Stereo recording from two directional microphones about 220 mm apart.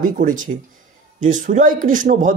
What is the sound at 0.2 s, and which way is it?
Speech, 35° right (ahead or behind).